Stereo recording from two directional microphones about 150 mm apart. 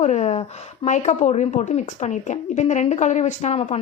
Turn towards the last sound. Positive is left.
turn(degrees=45)  # may be behind; listen again after turning